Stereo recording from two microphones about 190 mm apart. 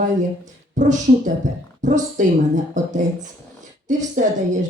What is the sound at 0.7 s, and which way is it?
Speech, 40° right (ahead or behind).